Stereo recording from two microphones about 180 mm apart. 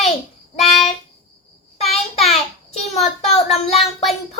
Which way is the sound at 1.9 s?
35° left (ahead or behind).